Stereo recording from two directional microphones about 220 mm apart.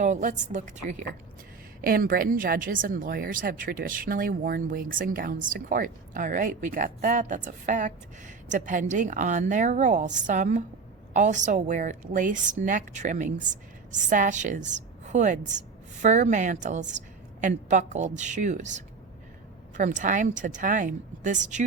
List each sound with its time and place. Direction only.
0.0 s a woman's voice: 35° right (ahead or behind)